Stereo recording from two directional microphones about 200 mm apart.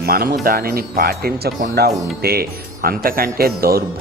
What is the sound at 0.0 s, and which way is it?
Speech, 50° right (ahead or behind).